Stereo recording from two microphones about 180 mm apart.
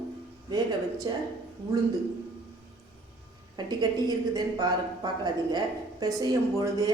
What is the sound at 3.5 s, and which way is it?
A woman's voice, 20° right (ahead or behind).